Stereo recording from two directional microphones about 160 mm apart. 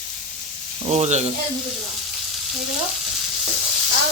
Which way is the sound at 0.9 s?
45° right (ahead or behind).